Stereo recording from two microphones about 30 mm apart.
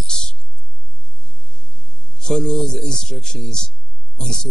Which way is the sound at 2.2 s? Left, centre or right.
Left.